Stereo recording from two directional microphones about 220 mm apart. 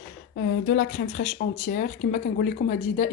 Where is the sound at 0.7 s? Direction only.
45° left (ahead or behind).